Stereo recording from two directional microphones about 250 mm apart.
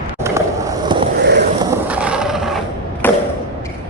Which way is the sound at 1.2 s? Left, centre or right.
Right.